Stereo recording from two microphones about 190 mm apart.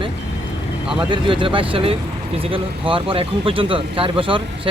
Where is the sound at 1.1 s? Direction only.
25° right (ahead or behind).